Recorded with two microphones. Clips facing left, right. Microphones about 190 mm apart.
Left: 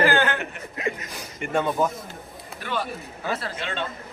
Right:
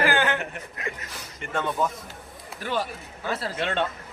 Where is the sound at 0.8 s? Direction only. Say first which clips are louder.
Left 8 dB; 15° left (ahead or behind).